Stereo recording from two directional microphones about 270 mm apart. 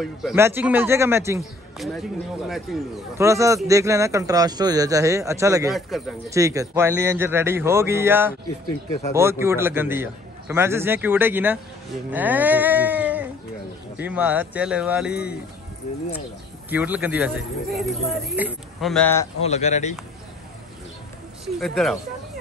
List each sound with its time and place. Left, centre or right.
0.0 s a man's voice: centre
3.2 s a man's voice: centre
5.8 s speech: centre
6.3 s a man's voice: centre
12.1 s music: centre
14.0 s speech: centre
16.7 s speech: centre
19.4 s speech: left
21.5 s speech: centre